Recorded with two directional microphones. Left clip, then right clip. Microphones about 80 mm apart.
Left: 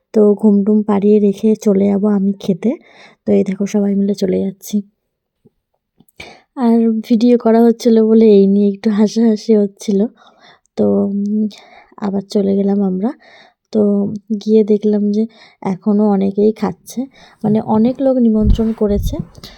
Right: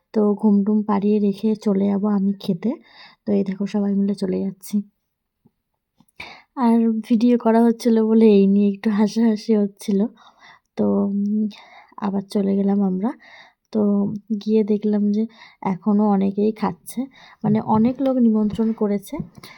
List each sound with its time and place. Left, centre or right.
0.1 s speech: left
6.1 s a woman's voice: left
15.9 s speech: centre
16.1 s a woman's voice: left